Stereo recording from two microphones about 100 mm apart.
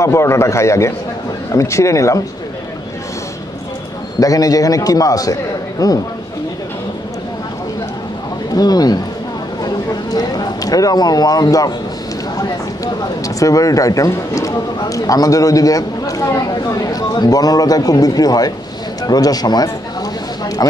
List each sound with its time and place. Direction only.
0.0 s a man's voice: 30° left (ahead or behind)
4.2 s speech: 35° left (ahead or behind)
8.5 s speech: 40° left (ahead or behind)
10.1 s speech: 40° left (ahead or behind)
19.0 s a sound: 40° left (ahead or behind)